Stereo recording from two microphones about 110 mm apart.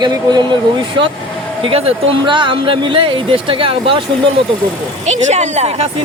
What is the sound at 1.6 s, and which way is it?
Speech, 60° right (ahead or behind).